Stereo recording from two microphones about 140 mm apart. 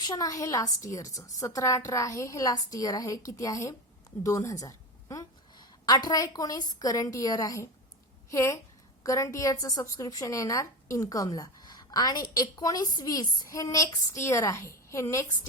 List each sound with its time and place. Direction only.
0.0 s a woman's voice: 25° left (ahead or behind)